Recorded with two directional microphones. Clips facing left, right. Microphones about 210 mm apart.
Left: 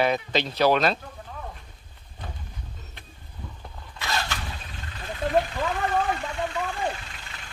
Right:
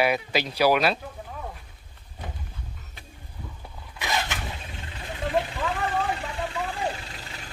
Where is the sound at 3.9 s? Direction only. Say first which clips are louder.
Right 1 dB; 15° right (ahead or behind).